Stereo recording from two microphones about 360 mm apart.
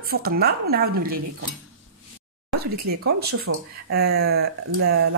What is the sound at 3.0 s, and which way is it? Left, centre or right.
Speech, right.